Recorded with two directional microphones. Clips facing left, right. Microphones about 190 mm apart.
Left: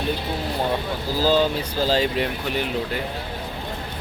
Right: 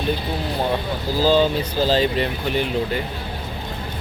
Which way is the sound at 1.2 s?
10° left (ahead or behind).